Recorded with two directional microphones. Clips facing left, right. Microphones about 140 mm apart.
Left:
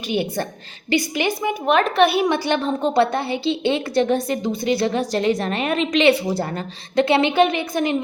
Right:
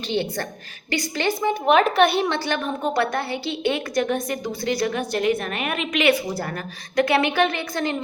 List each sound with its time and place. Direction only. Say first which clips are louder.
0.1 s a woman's voice: left 3 dB; 15° left (ahead or behind)
1.4 s speech: right 2 dB; centre (ahead or behind)
2.5 s a woman's voice: left 4 dB; 25° left (ahead or behind)